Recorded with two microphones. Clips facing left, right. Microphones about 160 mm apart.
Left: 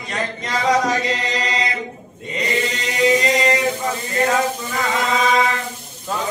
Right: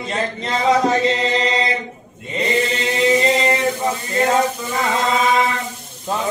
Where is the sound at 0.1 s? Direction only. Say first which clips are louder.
Right 1 dB; 25° right (ahead or behind).